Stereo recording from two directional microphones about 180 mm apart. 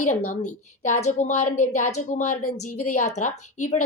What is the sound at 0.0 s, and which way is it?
A woman's voice, 40° left (ahead or behind).